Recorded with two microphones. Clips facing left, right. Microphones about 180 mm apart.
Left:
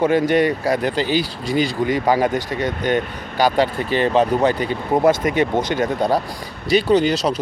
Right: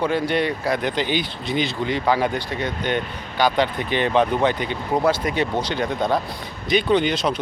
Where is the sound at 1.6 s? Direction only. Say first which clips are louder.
Left 5 dB; 45° left (ahead or behind).